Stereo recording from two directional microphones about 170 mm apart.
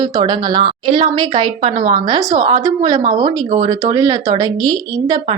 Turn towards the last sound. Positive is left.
turn(degrees=-25)  # may be behind; listen again after turning